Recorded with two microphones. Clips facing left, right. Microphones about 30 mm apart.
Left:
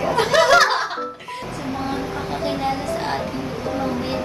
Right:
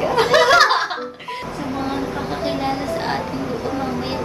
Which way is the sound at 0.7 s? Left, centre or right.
Right.